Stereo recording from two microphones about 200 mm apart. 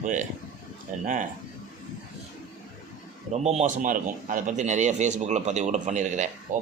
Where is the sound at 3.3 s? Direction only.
35° right (ahead or behind).